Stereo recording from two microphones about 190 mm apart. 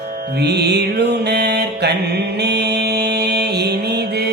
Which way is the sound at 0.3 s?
60° right (ahead or behind).